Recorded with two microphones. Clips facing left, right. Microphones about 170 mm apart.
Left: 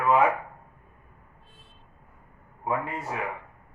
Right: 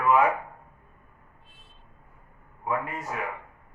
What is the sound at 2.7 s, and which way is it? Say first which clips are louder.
Speech: left 1 dB; 25° left (ahead or behind).